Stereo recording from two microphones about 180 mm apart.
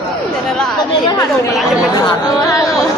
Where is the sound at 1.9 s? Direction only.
20° left (ahead or behind).